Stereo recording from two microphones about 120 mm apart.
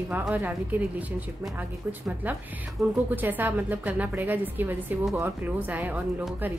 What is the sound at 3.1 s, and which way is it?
A woman's voice, 15° right (ahead or behind).